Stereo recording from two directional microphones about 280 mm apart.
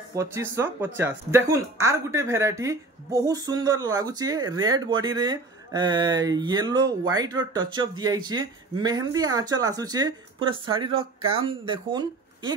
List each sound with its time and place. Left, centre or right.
0.1 s speech: centre